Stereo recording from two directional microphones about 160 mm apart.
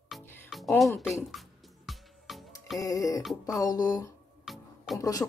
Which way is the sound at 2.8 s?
20° left (ahead or behind).